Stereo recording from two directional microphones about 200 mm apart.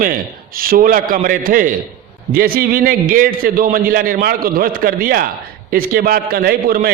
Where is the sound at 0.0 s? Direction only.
45° right (ahead or behind).